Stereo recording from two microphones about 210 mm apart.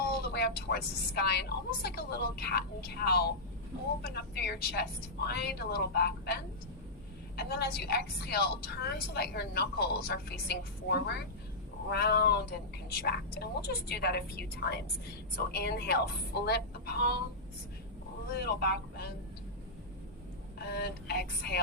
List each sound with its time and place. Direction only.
0.1 s a woman's voice: 50° left (ahead or behind)
18.3 s a woman's voice: 50° left (ahead or behind)
20.7 s a woman's voice: 50° left (ahead or behind)